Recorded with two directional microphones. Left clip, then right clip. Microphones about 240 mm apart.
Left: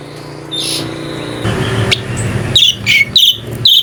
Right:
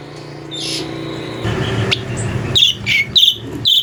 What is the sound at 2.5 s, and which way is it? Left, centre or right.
Insect, centre.